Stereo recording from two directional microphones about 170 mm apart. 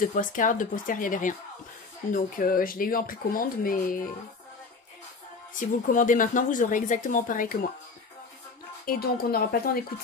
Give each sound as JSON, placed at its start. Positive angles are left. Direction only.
{"t": 0.0, "sound": "speech", "side_deg": 50}
{"t": 5.5, "sound": "speech", "side_deg": 50}
{"t": 8.8, "sound": "speech", "side_deg": 60}